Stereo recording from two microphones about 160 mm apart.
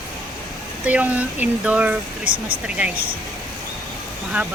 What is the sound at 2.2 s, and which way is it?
Speech, 65° right (ahead or behind).